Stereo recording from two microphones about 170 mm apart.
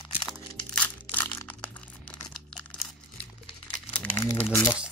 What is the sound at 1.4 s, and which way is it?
Crumpling, 10° left (ahead or behind).